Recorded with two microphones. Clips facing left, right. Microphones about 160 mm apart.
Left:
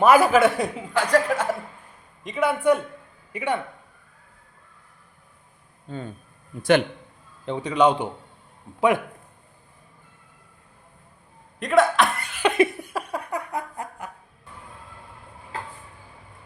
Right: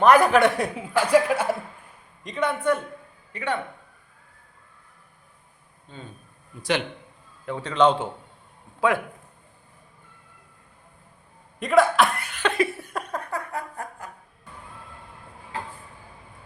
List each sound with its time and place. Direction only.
0.0 s a man's voice: 5° left (ahead or behind)
2.2 s a man's voice: 5° left (ahead or behind)
6.6 s a man's voice: 50° left (ahead or behind)
7.4 s a man's voice: 15° left (ahead or behind)
11.6 s cough: centre (ahead or behind)
12.4 s laughter: 15° left (ahead or behind)
12.9 s a sound: 10° left (ahead or behind)